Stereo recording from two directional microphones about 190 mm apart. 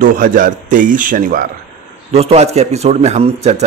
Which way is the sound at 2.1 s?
35° right (ahead or behind).